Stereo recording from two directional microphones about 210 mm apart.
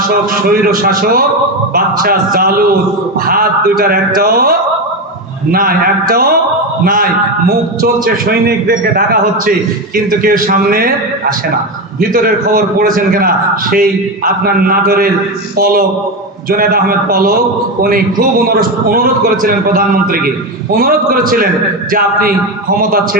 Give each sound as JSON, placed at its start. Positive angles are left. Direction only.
{"t": 0.1, "sound": "a man's voice", "side_deg": -45}